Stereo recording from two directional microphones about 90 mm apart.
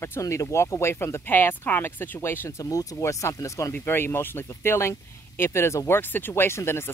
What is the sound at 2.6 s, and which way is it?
Speech, 40° left (ahead or behind).